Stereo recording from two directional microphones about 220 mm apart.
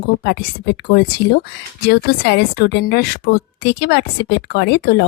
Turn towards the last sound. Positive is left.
turn(degrees=50)  # may be behind; listen again after turning